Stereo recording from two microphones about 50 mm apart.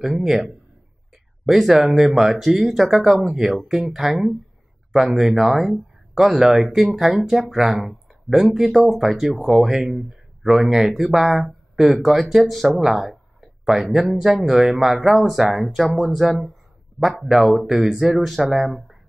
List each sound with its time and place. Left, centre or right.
0.0 s speech: centre
1.4 s speech: centre
12.8 s a sound: centre
13.9 s speech: centre